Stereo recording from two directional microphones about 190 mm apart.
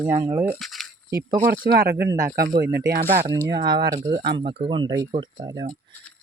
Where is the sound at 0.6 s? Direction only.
Centre (ahead or behind).